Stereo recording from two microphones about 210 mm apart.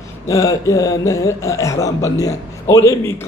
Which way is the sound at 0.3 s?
15° left (ahead or behind).